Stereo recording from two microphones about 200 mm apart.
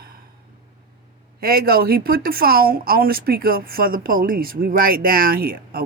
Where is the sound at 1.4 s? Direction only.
50° right (ahead or behind).